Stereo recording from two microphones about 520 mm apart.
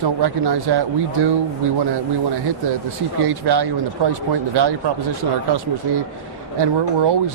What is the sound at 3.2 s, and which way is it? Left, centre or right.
Speech, right.